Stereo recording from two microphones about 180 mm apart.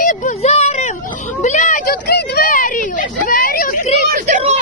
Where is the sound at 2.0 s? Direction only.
65° left (ahead or behind).